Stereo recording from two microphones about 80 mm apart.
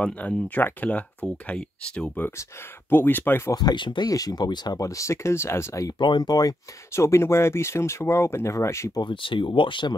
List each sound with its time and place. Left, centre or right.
0.0 s speech: centre
3.5 s speech: left
4.1 s speech: left
5.9 s speech: left
6.9 s speech: left
9.0 s speech: left